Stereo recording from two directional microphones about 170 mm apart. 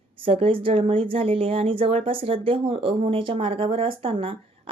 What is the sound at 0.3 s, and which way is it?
Speech, 30° right (ahead or behind).